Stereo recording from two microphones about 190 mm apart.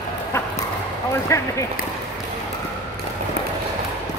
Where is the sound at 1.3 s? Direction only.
15° left (ahead or behind).